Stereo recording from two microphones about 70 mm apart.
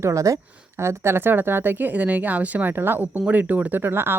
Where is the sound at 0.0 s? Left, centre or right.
Right.